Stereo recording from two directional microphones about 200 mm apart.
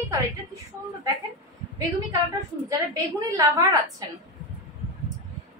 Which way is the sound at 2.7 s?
15° right (ahead or behind).